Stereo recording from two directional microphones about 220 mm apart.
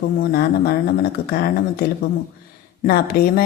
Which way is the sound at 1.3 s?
45° left (ahead or behind).